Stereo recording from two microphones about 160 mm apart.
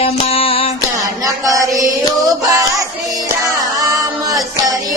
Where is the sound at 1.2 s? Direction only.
20° right (ahead or behind).